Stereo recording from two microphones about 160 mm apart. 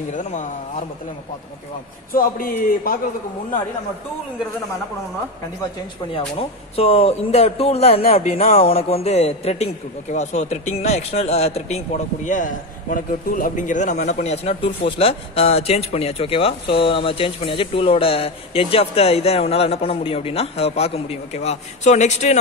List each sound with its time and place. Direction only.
0.1 s speech: 50° left (ahead or behind)
2.1 s a man's voice: 65° left (ahead or behind)
6.1 s speech: 35° left (ahead or behind)
8.5 s speech: 35° left (ahead or behind)